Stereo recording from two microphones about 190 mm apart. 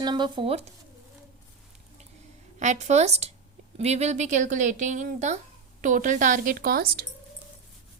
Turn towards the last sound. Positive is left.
turn(degrees=-50)  # may be behind; listen again after turning